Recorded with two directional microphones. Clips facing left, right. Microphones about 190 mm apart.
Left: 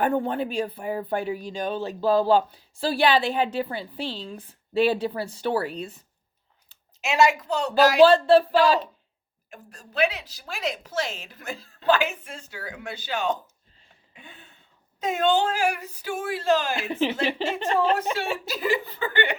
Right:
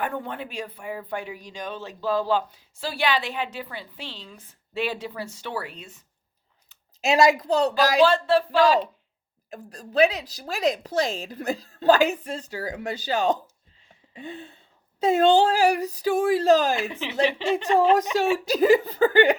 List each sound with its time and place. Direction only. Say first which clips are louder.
0.0 s speech: left 6 dB; 35° left (ahead or behind)
7.0 s a woman's voice: right 2 dB; 35° right (ahead or behind)
8.0 s speech: left 6 dB; 30° left (ahead or behind)
9.5 s a woman's voice: right 7 dB; 35° right (ahead or behind)
16.9 s speech: even; 35° left (ahead or behind)
17.7 s a woman's voice: right 4 dB; 40° right (ahead or behind)